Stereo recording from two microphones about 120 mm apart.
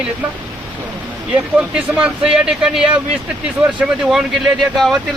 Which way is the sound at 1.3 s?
10° right (ahead or behind).